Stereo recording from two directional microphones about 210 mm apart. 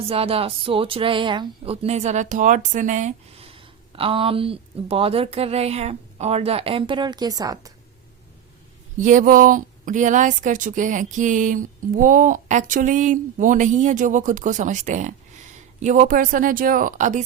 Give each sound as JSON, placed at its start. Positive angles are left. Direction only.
{"t": 0.0, "sound": "speech", "side_deg": -25}
{"t": 9.0, "sound": "speech", "side_deg": -40}